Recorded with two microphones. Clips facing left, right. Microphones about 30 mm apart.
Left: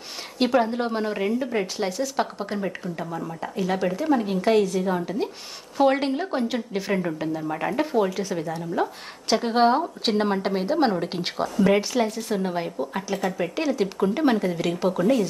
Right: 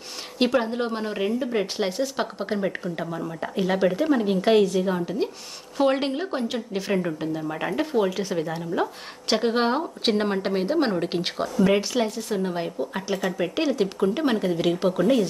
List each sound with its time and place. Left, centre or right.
0.3 s a woman's voice: centre
1.5 s speech: right
2.1 s speech: centre
3.4 s speech: right
3.7 s a woman's voice: centre
9.5 s a woman's voice: centre
13.1 s speech: right
13.6 s a woman's voice: centre
14.7 s speech: centre